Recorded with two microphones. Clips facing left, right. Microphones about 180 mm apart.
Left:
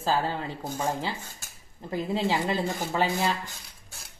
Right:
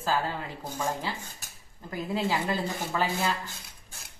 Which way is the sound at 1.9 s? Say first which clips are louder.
Left 2 dB; 25° left (ahead or behind).